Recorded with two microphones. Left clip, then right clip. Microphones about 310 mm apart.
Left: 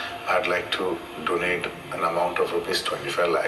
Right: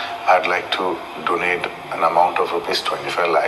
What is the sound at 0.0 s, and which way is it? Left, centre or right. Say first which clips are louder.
Speech: right 8 dB; centre.